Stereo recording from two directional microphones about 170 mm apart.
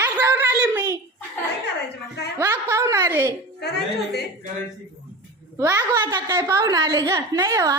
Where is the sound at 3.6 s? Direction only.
75° left (ahead or behind).